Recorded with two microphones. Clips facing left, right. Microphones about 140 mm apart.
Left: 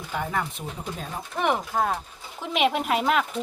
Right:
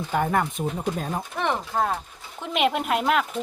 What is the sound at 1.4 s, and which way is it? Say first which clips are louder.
Speech: left 2 dB; 5° left (ahead or behind).